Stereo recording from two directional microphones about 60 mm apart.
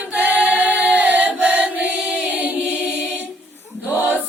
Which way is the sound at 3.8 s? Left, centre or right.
Right.